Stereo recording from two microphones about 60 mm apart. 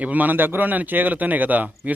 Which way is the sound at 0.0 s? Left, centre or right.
Right.